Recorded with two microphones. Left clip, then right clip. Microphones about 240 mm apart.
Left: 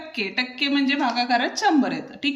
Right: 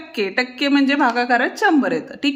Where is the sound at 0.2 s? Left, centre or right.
Centre.